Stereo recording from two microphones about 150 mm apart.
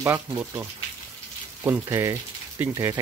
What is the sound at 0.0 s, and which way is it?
Speech, 15° right (ahead or behind).